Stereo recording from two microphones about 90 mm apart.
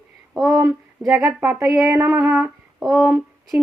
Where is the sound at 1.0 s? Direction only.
5° right (ahead or behind).